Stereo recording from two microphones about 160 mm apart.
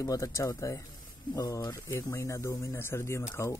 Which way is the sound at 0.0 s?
20° left (ahead or behind).